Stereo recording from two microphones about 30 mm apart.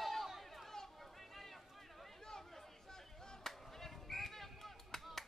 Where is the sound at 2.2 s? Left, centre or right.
Centre.